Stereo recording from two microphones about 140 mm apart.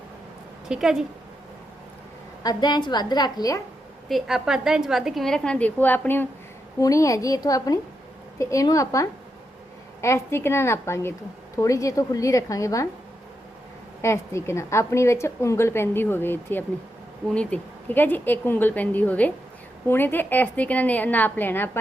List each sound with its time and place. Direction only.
0.7 s a woman's voice: 5° right (ahead or behind)
2.4 s a woman's voice: 30° left (ahead or behind)
4.1 s a woman's voice: 5° right (ahead or behind); by 12.9 s 25° left (ahead or behind)
14.0 s a woman's voice: 20° left (ahead or behind)